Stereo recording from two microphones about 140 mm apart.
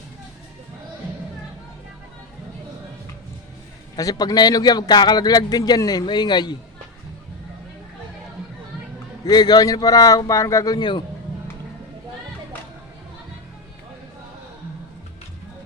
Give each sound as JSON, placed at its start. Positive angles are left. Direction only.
{"t": 3.9, "sound": "a man's voice", "side_deg": 25}
{"t": 9.2, "sound": "a man's voice", "side_deg": 30}